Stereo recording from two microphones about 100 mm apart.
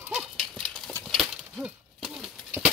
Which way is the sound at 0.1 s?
Centre (ahead or behind).